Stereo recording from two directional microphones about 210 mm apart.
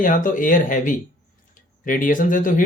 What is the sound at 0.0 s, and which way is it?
Speech, 40° left (ahead or behind).